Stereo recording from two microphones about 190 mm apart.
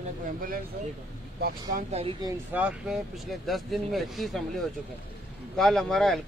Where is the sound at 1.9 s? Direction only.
30° right (ahead or behind).